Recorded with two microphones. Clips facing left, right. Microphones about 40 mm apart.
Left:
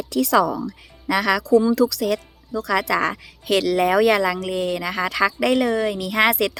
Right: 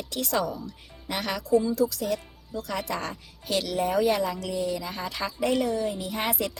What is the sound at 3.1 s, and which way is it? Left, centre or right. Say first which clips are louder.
A woman's voice: left 8 dB; left.